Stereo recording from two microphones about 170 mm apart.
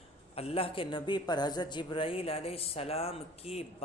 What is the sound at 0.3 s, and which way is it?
Speech, 35° left (ahead or behind).